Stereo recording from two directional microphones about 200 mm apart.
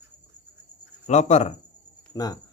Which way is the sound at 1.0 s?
35° left (ahead or behind).